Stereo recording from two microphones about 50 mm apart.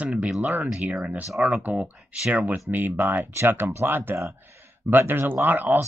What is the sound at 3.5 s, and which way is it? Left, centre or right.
Speech, right.